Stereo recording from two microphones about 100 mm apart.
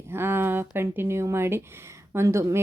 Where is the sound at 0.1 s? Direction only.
25° right (ahead or behind).